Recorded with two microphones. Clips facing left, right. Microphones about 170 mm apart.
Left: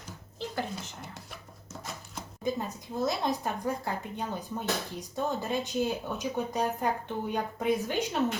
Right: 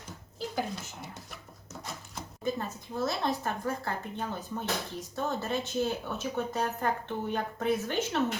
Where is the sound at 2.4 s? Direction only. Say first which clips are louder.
Left 1 dB; 15° left (ahead or behind).